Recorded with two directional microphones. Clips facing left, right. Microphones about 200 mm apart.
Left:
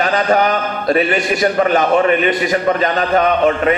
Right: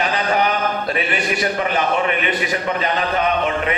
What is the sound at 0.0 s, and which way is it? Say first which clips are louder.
A man's voice: left 5 dB; 45° left (ahead or behind).